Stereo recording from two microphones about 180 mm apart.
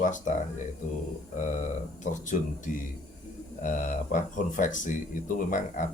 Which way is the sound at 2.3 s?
45° left (ahead or behind).